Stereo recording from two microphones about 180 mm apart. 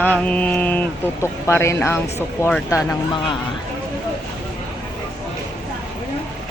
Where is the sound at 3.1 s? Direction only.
25° left (ahead or behind).